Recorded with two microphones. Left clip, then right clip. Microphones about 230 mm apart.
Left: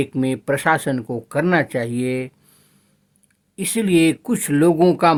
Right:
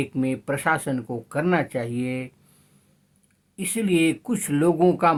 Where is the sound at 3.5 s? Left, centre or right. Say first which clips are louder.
Left 5 dB; left.